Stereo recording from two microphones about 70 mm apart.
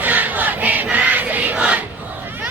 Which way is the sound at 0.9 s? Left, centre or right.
Right.